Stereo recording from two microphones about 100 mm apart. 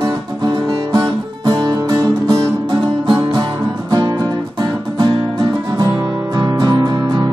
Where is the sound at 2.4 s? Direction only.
55° right (ahead or behind).